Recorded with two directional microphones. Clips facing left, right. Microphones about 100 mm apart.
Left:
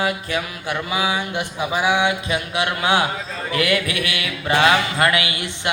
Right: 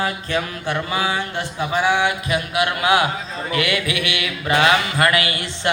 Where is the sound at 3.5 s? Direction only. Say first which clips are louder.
Left 1 dB; 40° left (ahead or behind); by 5.7 s 20° left (ahead or behind).